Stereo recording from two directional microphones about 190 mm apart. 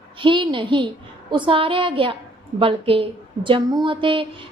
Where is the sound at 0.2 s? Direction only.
25° right (ahead or behind).